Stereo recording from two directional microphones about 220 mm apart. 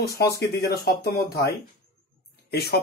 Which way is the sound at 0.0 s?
45° left (ahead or behind).